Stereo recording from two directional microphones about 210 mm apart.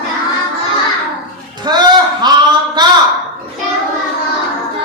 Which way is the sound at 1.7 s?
20° right (ahead or behind).